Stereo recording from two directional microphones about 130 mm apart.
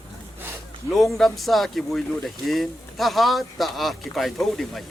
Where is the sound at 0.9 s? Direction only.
Centre (ahead or behind).